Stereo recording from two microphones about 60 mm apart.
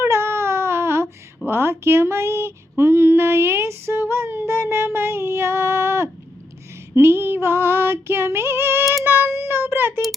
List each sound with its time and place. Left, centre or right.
0.0 s baby cry: right
1.5 s female singing: right
6.9 s a sound: right
7.4 s female singing: right
9.0 s music: right